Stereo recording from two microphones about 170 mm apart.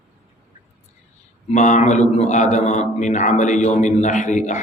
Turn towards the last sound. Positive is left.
turn(degrees=45)  # may be behind; listen again after turning